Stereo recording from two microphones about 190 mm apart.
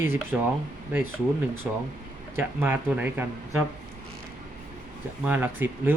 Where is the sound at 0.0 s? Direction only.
10° right (ahead or behind).